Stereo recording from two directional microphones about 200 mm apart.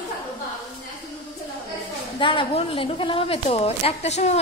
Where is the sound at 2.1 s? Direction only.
25° left (ahead or behind).